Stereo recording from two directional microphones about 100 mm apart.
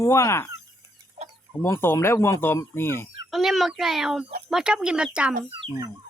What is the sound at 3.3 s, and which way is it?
A child's voice, centre (ahead or behind).